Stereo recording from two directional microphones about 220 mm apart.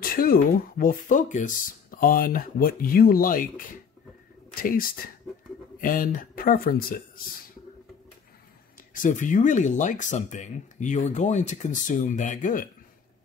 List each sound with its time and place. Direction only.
0.0 s speech: 40° left (ahead or behind)
8.9 s speech: 35° left (ahead or behind)